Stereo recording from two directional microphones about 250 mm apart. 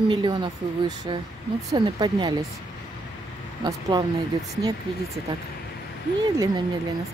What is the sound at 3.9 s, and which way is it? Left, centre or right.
Speech, centre.